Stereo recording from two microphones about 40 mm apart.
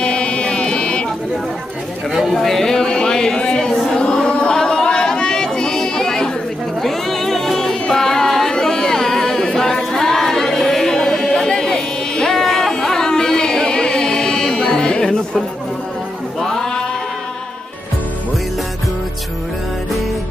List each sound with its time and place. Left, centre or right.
0.0 s music: left
2.3 s a sound: centre; by 3.7 s left
3.7 s chant: centre
4.0 s chatter: left
6.8 s music: centre
8.5 s a capella: centre
16.3 s music: centre